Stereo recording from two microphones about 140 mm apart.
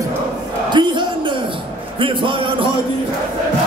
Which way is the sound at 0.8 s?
30° right (ahead or behind).